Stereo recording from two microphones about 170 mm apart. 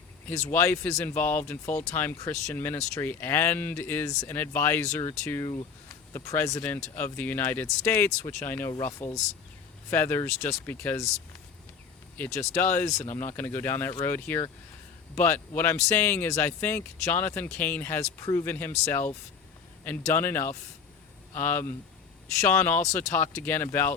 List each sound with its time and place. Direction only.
0.3 s speech: 10° left (ahead or behind)
12.1 s speech: 15° left (ahead or behind)